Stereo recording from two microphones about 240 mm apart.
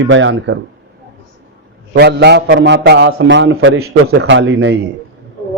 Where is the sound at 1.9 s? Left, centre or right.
Right.